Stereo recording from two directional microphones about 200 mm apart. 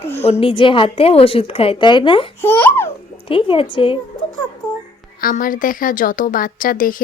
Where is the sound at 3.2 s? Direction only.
25° left (ahead or behind).